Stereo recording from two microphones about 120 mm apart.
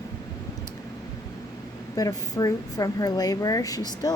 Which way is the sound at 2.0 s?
30° left (ahead or behind).